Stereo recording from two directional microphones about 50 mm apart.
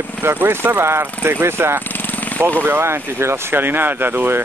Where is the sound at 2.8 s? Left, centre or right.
Right.